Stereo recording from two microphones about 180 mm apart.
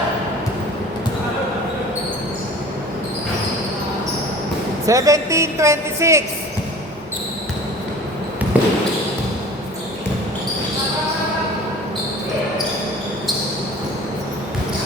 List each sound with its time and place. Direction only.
4.9 s a woman's voice: 20° right (ahead or behind)
8.5 s basketball bounce: 10° right (ahead or behind)